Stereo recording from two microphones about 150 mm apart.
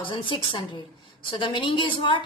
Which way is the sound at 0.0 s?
35° left (ahead or behind).